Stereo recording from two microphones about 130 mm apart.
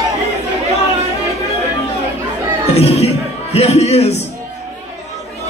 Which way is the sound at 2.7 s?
50° left (ahead or behind).